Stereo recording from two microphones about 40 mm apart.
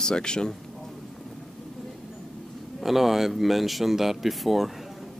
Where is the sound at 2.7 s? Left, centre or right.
Centre.